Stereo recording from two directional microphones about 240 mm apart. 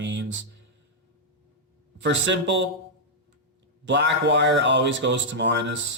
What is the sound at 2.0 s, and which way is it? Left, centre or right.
Speech, right.